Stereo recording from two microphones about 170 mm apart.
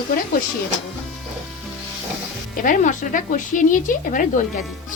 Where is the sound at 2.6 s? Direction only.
45° left (ahead or behind).